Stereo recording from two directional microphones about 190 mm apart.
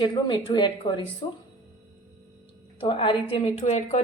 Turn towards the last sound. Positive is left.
turn(degrees=35)  # may be behind; listen again after turning